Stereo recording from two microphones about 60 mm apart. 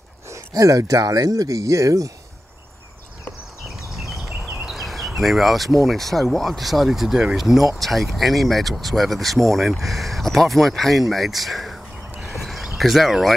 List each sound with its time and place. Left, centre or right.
0.3 s speech: right
4.6 s a sound: centre
5.9 s speech: centre